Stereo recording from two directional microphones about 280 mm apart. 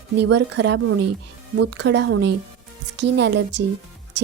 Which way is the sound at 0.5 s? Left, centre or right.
Right.